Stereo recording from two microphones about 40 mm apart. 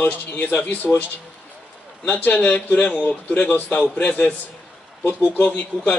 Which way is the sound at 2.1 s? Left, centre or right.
Left.